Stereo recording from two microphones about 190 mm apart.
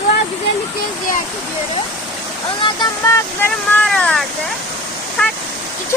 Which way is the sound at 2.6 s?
20° left (ahead or behind).